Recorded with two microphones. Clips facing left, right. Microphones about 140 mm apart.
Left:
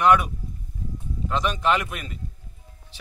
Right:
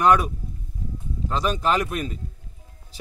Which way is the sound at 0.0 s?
35° right (ahead or behind).